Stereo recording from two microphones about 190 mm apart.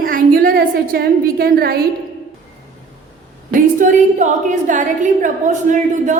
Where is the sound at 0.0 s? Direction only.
50° right (ahead or behind).